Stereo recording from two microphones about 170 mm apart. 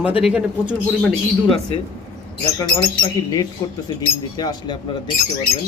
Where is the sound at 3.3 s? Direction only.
20° left (ahead or behind).